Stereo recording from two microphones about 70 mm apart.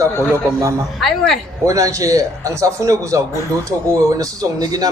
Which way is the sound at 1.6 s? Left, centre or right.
Right.